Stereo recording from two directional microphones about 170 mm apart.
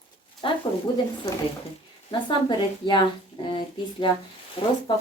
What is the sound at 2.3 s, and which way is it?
Speech, 25° left (ahead or behind).